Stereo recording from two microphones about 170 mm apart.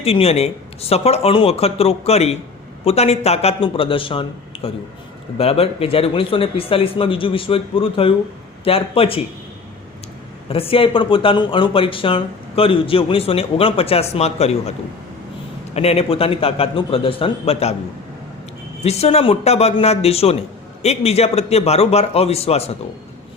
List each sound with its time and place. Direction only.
0.0 s speech: 35° left (ahead or behind)
10.5 s speech: 35° left (ahead or behind)
15.7 s speech: 35° left (ahead or behind)
18.8 s speech: 40° left (ahead or behind)